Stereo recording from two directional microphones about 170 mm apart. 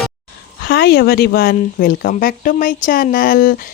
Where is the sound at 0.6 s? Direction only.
70° left (ahead or behind).